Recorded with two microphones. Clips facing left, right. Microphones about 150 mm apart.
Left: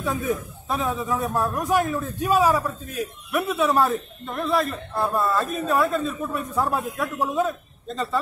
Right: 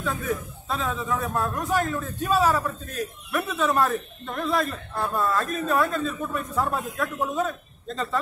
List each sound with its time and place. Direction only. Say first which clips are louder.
0.3 s a man's voice: left 3 dB; 20° left (ahead or behind)
1.3 s speech: left 4 dB; 5° left (ahead or behind)